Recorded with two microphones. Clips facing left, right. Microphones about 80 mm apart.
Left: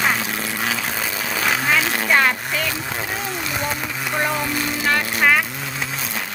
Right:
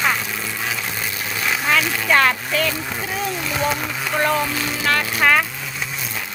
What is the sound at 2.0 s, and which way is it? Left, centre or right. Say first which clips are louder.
Speech: right 2 dB; centre.